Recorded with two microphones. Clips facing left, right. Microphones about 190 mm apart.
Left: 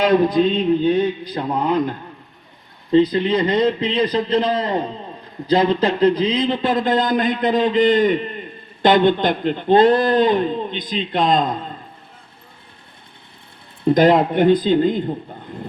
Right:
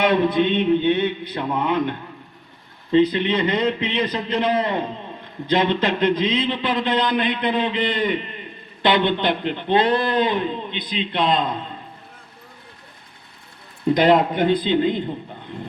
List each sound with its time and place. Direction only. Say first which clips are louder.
0.0 s mantra: left 3 dB; 35° left (ahead or behind)
5.5 s a man's voice: left 3 dB; 35° left (ahead or behind)
13.9 s a man's voice: left 2 dB; 45° left (ahead or behind)